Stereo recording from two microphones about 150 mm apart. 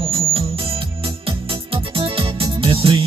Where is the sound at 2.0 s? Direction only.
35° right (ahead or behind).